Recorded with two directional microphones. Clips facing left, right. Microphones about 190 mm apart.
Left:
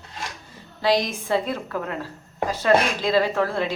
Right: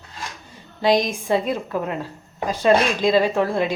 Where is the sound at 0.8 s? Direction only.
20° right (ahead or behind).